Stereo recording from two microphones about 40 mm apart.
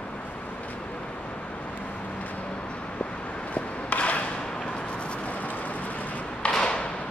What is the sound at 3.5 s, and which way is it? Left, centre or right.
Rub, left.